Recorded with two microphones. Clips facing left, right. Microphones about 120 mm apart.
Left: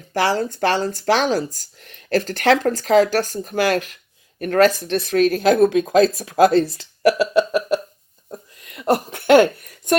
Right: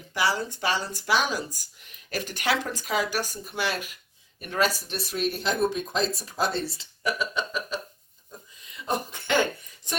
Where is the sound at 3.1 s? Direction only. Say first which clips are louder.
Left 10 dB; 45° left (ahead or behind).